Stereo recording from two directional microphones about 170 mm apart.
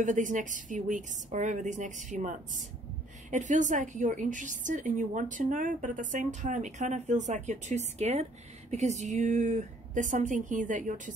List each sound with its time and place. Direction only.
0.0 s a woman's voice: 50° right (ahead or behind)